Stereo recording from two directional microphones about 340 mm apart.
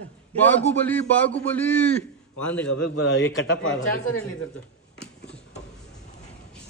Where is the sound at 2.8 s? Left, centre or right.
Left.